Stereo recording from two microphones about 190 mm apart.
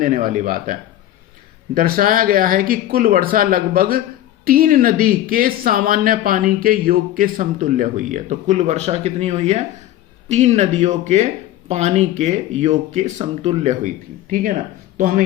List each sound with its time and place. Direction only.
0.0 s speech: 45° right (ahead or behind)